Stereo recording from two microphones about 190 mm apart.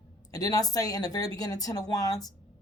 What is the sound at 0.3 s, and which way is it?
A woman's voice, 20° left (ahead or behind).